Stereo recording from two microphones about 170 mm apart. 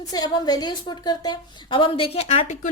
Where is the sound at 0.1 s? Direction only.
25° left (ahead or behind).